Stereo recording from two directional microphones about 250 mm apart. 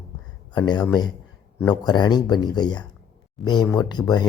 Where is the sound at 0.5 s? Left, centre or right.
Centre.